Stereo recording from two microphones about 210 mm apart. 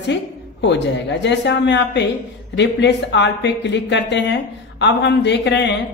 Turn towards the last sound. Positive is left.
turn(degrees=55)  # may be behind; listen again after turning